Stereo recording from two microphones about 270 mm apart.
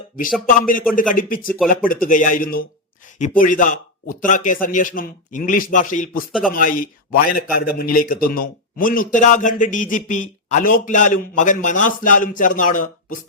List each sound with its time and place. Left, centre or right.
0.4 s a man's voice: left